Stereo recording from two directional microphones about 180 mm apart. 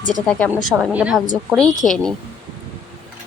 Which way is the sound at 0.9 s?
5° right (ahead or behind).